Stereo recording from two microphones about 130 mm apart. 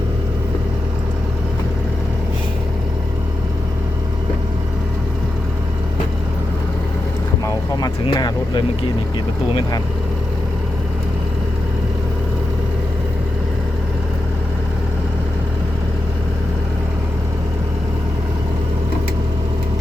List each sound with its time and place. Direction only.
8.0 s speech: 40° left (ahead or behind)